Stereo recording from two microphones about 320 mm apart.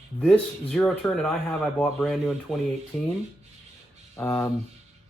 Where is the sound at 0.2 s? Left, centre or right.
Centre.